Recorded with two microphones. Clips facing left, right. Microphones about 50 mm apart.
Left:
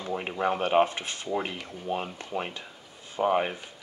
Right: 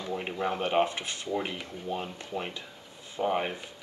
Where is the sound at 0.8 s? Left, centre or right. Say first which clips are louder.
Even; left.